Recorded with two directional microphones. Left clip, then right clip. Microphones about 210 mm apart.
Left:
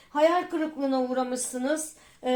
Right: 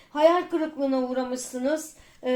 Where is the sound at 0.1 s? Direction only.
30° left (ahead or behind).